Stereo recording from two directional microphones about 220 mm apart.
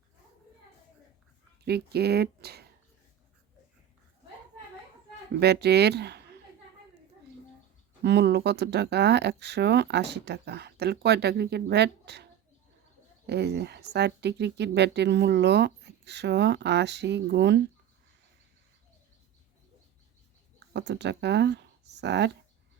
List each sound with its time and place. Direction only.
1.6 s speech: 45° right (ahead or behind)
5.4 s speech: 50° right (ahead or behind)
8.0 s speech: 50° right (ahead or behind)
20.7 s speech: 50° right (ahead or behind)